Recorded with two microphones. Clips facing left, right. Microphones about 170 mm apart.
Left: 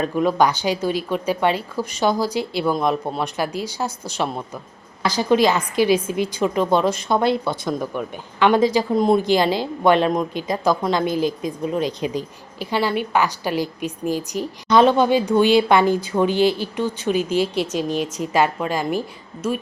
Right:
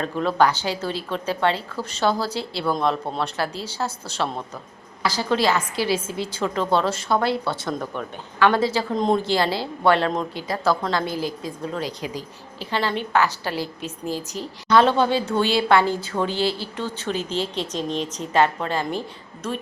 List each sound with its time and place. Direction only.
0.0 s a woman's voice: 15° left (ahead or behind)